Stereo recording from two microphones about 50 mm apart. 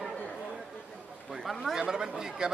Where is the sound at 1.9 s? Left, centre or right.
Centre.